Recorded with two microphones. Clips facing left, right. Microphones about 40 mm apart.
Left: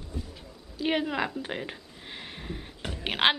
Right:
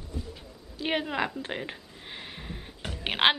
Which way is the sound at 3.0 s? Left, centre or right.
Centre.